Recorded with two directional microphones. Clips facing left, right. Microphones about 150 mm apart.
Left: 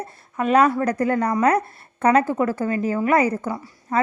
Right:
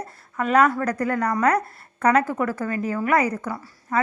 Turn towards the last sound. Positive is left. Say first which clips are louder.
# left 2 dB
turn(degrees=25)  # may be behind; listen again after turning